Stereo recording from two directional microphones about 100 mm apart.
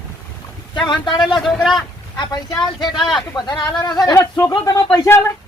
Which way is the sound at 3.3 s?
45° left (ahead or behind).